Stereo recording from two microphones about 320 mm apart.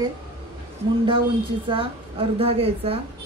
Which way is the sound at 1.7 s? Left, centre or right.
Centre.